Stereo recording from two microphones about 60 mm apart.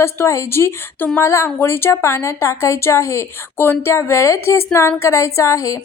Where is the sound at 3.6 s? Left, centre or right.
Left.